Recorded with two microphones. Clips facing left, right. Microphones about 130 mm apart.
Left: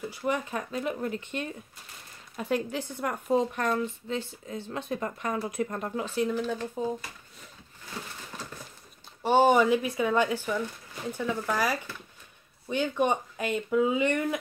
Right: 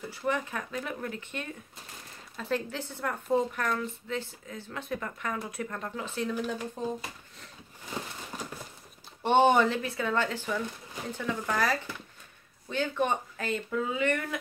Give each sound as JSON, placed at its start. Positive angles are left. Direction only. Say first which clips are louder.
{"t": 0.1, "sound": "a woman's voice", "louder": "even", "side_deg": 15}
{"t": 9.2, "sound": "speech", "louder": "left 1 dB", "side_deg": 5}